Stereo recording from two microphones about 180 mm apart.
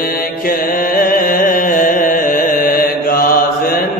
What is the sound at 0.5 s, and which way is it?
Music, 50° left (ahead or behind).